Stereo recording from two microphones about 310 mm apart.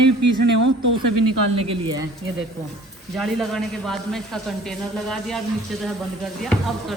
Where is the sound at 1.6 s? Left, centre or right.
Centre.